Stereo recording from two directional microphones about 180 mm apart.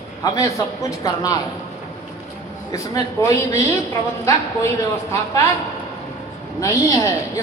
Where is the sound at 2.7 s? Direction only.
20° left (ahead or behind).